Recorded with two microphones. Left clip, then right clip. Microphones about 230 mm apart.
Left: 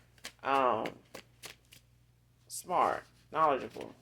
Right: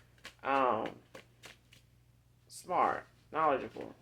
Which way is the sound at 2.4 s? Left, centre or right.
Left.